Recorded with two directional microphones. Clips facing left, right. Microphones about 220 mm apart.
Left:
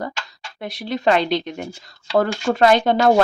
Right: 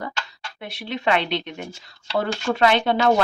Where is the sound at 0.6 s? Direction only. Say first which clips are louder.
Left 5 dB; 40° left (ahead or behind).